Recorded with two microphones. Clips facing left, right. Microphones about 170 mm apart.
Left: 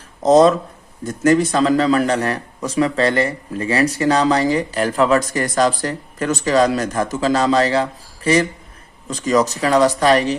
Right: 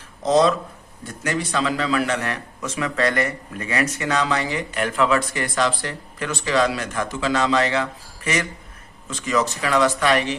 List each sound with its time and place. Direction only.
0.2 s speech: 45° left (ahead or behind)